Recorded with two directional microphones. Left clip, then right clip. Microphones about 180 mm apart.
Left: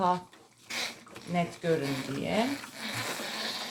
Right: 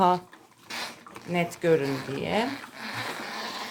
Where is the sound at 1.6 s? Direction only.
65° right (ahead or behind).